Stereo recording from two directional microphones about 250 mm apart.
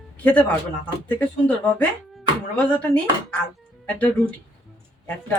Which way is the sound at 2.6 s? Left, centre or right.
Centre.